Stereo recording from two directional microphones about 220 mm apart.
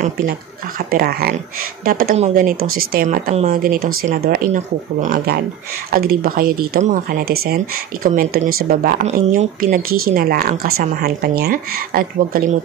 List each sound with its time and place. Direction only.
0.7 s speech: 45° right (ahead or behind)